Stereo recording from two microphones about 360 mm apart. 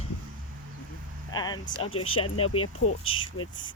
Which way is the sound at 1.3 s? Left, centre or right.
Centre.